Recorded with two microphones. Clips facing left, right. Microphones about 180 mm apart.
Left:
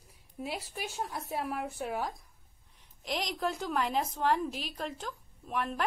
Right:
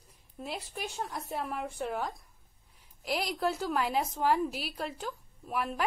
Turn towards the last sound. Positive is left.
turn(degrees=-5)  # may be behind; listen again after turning